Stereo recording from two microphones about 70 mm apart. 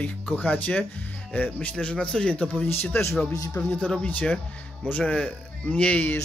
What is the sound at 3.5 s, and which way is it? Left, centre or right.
Speech, left.